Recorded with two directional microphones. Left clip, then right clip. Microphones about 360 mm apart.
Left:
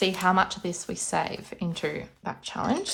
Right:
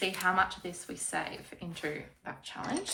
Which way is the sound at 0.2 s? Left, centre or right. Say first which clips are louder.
Left 5 dB; centre.